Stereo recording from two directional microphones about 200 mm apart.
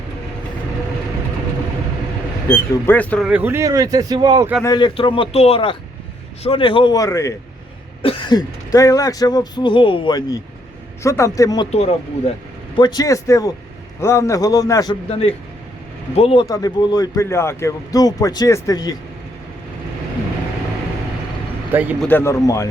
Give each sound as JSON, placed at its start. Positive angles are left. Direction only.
{"t": 2.5, "sound": "a man's voice", "side_deg": 10}
{"t": 3.2, "sound": "speech", "side_deg": -10}
{"t": 4.6, "sound": "speech", "side_deg": 20}
{"t": 8.0, "sound": "a man's voice", "side_deg": 25}
{"t": 11.7, "sound": "speech", "side_deg": 30}
{"t": 12.7, "sound": "a man's voice", "side_deg": 20}
{"t": 16.1, "sound": "a man's voice", "side_deg": 25}
{"t": 21.7, "sound": "speech", "side_deg": -10}
{"t": 22.0, "sound": "a man's voice", "side_deg": 10}